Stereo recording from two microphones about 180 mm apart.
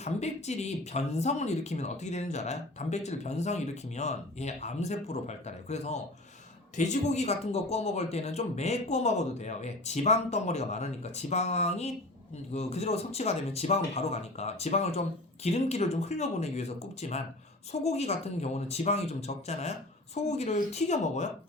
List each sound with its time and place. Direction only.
0.0 s speech: 40° left (ahead or behind)